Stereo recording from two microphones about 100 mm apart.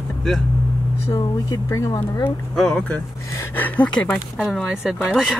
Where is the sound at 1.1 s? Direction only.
30° left (ahead or behind).